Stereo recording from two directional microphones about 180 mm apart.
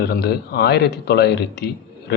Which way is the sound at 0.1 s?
60° left (ahead or behind).